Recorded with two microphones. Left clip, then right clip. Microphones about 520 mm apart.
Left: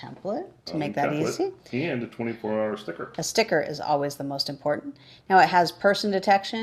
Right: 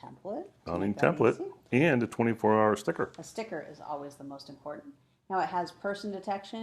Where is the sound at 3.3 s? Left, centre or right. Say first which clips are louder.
Left 15 dB; left.